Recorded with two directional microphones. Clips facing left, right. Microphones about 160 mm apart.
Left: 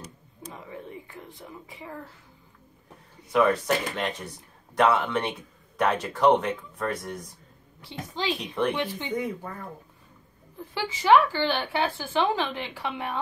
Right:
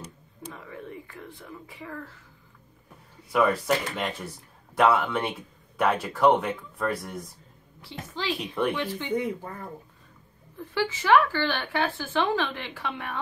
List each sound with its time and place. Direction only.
0.5 s whispering: 20° left (ahead or behind)
3.3 s speech: centre (ahead or behind)
7.8 s a woman's voice: 20° left (ahead or behind)
8.4 s speech: centre (ahead or behind)
8.7 s a woman's voice: 15° left (ahead or behind)
10.7 s a woman's voice: 15° left (ahead or behind)